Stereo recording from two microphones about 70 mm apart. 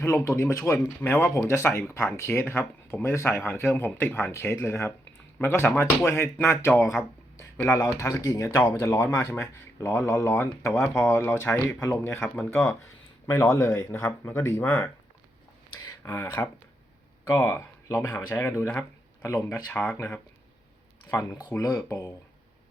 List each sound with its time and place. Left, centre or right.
0.0 s speech: left
1.0 s speech: left
1.5 s speech: left
6.7 s a sound: left
7.7 s speech: left
13.2 s speech: left
15.8 s a sound: left
16.1 s speech: left
19.2 s speech: left
19.6 s speech: left
21.1 s speech: left
21.6 s speech: left